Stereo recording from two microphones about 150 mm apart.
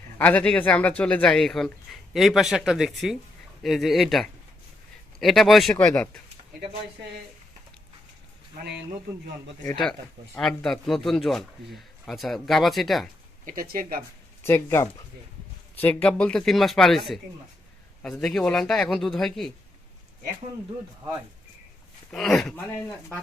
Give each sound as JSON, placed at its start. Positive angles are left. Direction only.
{"t": 0.2, "sound": "speech", "side_deg": 10}
{"t": 5.7, "sound": "speech", "side_deg": 15}
{"t": 10.3, "sound": "speech", "side_deg": 5}
{"t": 13.4, "sound": "speech", "side_deg": -70}
{"t": 14.4, "sound": "speech", "side_deg": 15}
{"t": 18.0, "sound": "speech", "side_deg": 5}
{"t": 22.1, "sound": "speech", "side_deg": 5}